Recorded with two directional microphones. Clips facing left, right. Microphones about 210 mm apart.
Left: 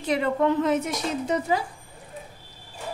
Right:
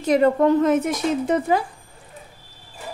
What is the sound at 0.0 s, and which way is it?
A woman's voice, 45° right (ahead or behind).